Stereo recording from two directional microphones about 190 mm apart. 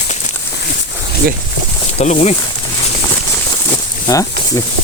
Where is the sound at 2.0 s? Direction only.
35° left (ahead or behind).